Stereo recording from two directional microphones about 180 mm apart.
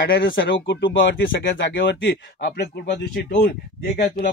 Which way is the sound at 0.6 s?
85° left.